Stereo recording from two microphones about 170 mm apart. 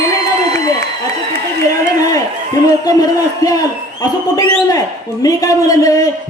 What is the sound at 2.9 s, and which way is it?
A man's voice, 20° left (ahead or behind).